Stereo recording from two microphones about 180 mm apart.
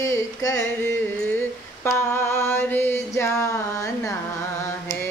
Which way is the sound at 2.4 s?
10° left (ahead or behind).